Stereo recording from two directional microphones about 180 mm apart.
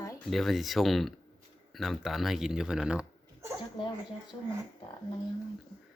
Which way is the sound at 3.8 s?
25° left (ahead or behind).